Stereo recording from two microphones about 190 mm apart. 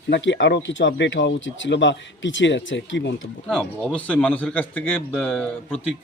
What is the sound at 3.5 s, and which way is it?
Speech, 5° left (ahead or behind).